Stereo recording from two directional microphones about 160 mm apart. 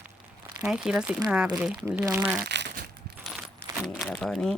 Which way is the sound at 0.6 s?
5° right (ahead or behind).